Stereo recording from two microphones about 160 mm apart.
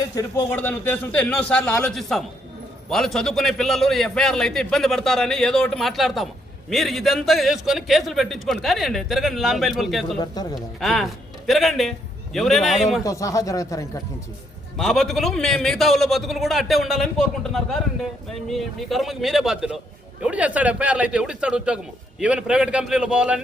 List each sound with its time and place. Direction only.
0.0 s a man's voice: 20° left (ahead or behind); by 13.0 s centre (ahead or behind)
13.0 s speech: 20° left (ahead or behind)
14.8 s a man's voice: centre (ahead or behind)